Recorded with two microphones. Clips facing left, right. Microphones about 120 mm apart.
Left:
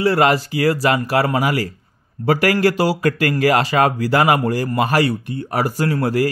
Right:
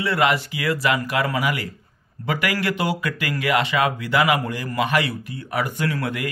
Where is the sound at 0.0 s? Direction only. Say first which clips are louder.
Left 5 dB; 35° left (ahead or behind).